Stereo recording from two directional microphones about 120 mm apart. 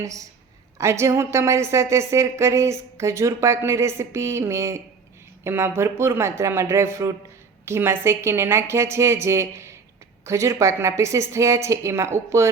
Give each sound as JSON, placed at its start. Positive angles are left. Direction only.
{"t": 0.0, "sound": "a woman's voice", "side_deg": -25}